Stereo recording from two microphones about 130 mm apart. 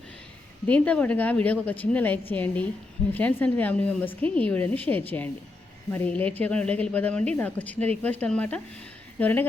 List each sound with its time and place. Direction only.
0.7 s speech: 10° left (ahead or behind)